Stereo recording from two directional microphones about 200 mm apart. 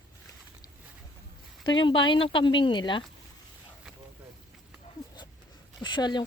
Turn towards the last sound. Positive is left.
turn(degrees=20)  # may be behind; listen again after turning